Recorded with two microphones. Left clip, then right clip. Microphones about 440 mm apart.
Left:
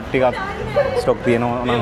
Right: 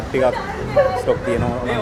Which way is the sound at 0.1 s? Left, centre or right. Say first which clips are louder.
Left 1 dB; left.